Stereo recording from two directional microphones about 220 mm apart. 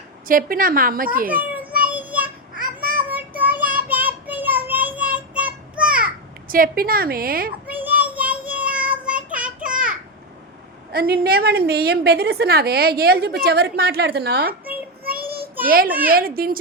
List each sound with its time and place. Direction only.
0.3 s a woman's voice: 40° right (ahead or behind)
1.3 s a child's voice: 5° right (ahead or behind)
1.8 s child singing: 5° right (ahead or behind)
2.6 s a sound: 40° right (ahead or behind)
3.0 s child singing: 5° right (ahead or behind)
6.5 s a woman's voice: 40° right (ahead or behind)
7.7 s child singing: 5° right (ahead or behind)
10.9 s a woman's voice: 45° right (ahead or behind)
15.0 s child singing: 40° right (ahead or behind)
15.6 s a woman's voice: 40° right (ahead or behind)